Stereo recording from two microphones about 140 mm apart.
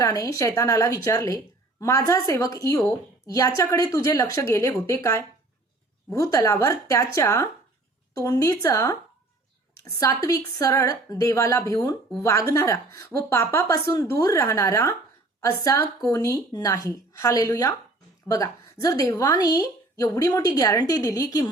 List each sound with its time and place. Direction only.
0.0 s a woman's voice: 25° left (ahead or behind)